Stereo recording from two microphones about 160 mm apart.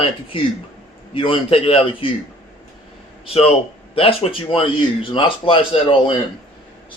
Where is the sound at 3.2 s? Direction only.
35° left (ahead or behind).